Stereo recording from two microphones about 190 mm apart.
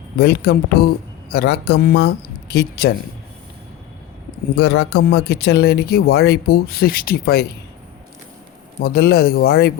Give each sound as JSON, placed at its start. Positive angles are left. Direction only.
{"t": 0.2, "sound": "a man's voice", "side_deg": 60}
{"t": 4.7, "sound": "a man's voice", "side_deg": 60}
{"t": 8.8, "sound": "a man's voice", "side_deg": 55}